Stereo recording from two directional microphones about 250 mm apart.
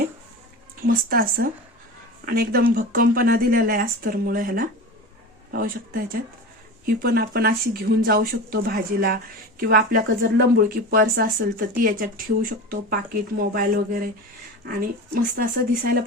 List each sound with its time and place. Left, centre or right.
0.8 s speech: right